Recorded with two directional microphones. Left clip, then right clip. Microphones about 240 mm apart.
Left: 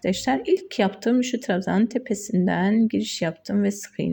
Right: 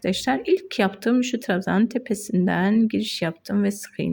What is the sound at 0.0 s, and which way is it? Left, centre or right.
Speech, centre.